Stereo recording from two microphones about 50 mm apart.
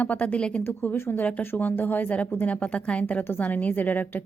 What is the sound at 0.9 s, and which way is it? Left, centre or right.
Speech, left.